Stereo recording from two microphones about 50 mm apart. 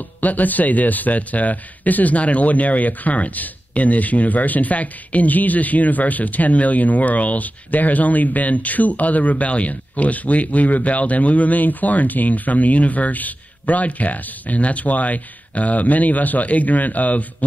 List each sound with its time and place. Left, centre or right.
0.2 s speech: left